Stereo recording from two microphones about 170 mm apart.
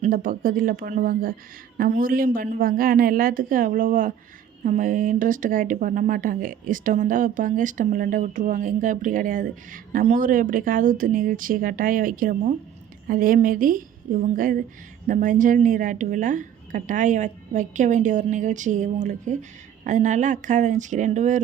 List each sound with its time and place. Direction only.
0.0 s a woman's voice: 55° right (ahead or behind)